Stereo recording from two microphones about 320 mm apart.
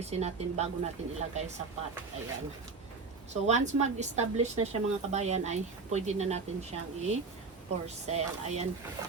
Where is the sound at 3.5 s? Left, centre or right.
Right.